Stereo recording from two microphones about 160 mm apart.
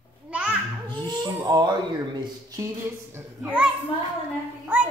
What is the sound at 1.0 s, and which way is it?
Speech, 25° right (ahead or behind).